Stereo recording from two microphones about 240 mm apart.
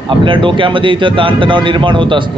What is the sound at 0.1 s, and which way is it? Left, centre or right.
A man's voice, right.